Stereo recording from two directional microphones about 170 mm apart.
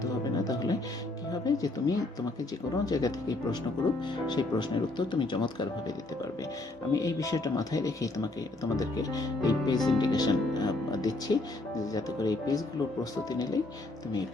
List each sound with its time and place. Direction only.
0.0 s music: 20° left (ahead or behind)
1.3 s speech: 20° left (ahead or behind)
6.9 s speech: 20° left (ahead or behind)